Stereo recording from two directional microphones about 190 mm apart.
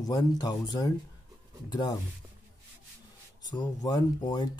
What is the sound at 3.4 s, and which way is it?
Speech, 20° left (ahead or behind).